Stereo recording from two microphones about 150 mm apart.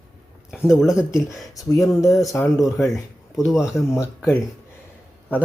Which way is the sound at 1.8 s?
20° left (ahead or behind).